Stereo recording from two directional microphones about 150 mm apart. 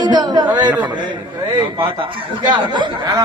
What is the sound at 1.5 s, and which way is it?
Speech, 30° right (ahead or behind).